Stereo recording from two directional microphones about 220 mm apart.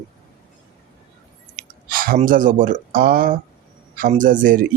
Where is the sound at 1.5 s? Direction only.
40° right (ahead or behind).